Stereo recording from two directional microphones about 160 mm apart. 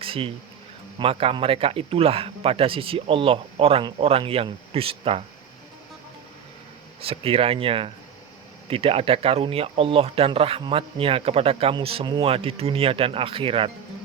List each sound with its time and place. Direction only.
0.0 s a sound: 35° right (ahead or behind)
0.9 s speech: 35° right (ahead or behind)
7.0 s speech: 35° right (ahead or behind)